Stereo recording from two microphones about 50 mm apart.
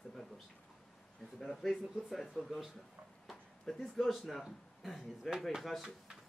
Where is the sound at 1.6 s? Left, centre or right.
Centre.